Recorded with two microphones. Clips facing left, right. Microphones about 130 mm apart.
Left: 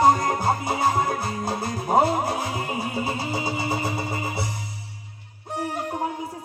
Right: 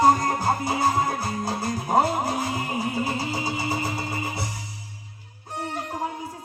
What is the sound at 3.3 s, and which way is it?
Music, 25° left (ahead or behind).